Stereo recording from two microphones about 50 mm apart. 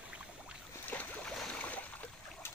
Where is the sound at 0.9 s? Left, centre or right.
Left.